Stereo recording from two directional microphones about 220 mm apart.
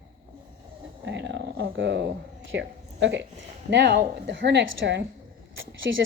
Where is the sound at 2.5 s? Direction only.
55° right (ahead or behind).